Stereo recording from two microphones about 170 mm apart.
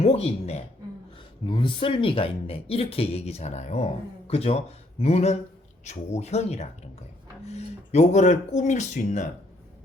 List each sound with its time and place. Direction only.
0.0 s speech: 35° left (ahead or behind)